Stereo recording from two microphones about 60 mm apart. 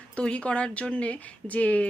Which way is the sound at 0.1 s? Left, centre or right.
Centre.